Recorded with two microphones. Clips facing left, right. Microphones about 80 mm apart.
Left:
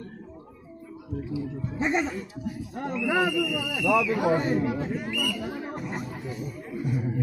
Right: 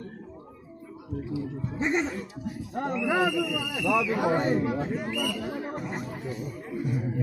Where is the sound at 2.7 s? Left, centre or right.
Right.